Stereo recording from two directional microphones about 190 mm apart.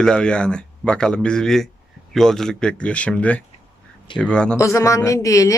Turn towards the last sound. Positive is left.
turn(degrees=15)  # may be behind; listen again after turning